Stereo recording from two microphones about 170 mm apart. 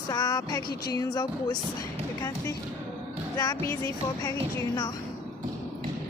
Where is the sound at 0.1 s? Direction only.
20° left (ahead or behind).